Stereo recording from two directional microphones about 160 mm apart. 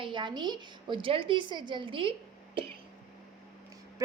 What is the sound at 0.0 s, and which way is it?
A woman's voice, 30° right (ahead or behind).